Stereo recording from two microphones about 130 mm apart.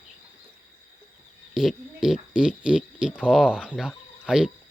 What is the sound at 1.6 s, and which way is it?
Speech, 5° right (ahead or behind).